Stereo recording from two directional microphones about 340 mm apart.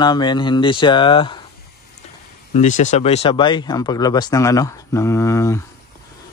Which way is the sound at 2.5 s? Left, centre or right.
Left.